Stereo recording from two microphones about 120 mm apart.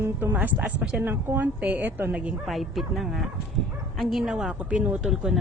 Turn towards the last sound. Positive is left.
turn(degrees=-5)  # may be behind; listen again after turning